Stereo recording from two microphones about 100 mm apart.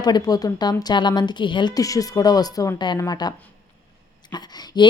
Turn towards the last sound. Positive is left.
turn(degrees=50)  # may be behind; listen again after turning